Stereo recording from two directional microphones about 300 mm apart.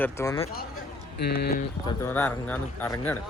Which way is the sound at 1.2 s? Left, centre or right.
Left.